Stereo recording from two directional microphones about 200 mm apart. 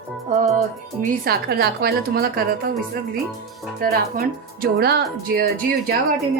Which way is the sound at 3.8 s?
50° right (ahead or behind).